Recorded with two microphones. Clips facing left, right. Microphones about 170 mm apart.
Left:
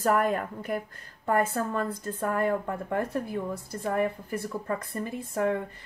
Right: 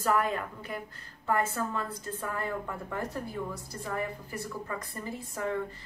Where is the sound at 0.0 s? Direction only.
50° left (ahead or behind).